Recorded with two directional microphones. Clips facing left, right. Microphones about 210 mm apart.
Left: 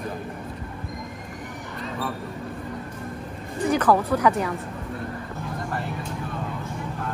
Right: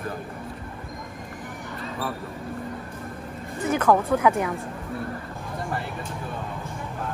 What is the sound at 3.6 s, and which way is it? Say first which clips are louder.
Speech: left 1 dB; 5° right (ahead or behind).